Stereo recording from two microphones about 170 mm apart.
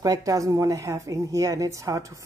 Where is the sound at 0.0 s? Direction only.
20° right (ahead or behind).